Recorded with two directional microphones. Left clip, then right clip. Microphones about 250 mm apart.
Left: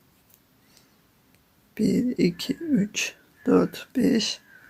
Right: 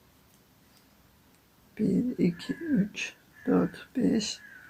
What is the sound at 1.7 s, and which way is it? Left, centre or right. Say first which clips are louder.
Speech: left 5 dB; left.